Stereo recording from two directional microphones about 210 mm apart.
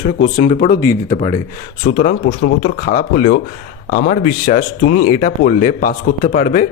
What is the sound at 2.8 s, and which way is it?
A man's voice, 40° left (ahead or behind).